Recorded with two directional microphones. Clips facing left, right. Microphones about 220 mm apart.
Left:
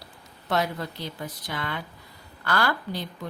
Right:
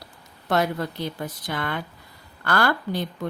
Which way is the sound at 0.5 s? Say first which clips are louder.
Right 4 dB; 50° right (ahead or behind).